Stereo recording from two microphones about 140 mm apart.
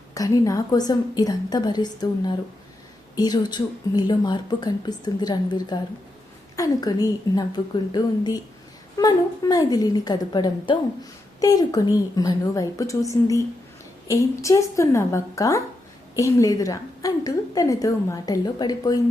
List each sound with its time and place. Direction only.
0.1 s a woman's voice: 25° left (ahead or behind)